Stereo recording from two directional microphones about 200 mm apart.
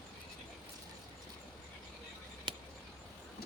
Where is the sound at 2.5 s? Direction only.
25° right (ahead or behind).